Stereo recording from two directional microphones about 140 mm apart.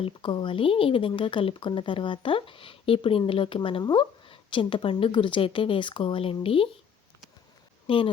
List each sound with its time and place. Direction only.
0.0 s speech: 35° left (ahead or behind)
7.9 s speech: 40° left (ahead or behind)